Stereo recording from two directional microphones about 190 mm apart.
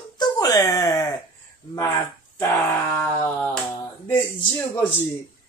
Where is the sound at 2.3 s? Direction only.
10° left (ahead or behind).